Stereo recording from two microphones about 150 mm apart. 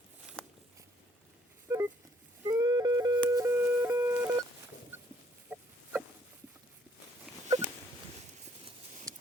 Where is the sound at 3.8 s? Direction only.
20° right (ahead or behind).